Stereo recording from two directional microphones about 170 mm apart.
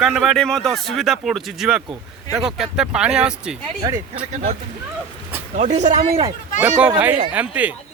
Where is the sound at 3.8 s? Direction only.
20° right (ahead or behind).